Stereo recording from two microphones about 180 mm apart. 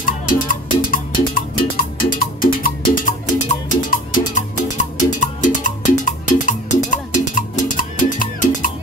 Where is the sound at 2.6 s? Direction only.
50° left (ahead or behind).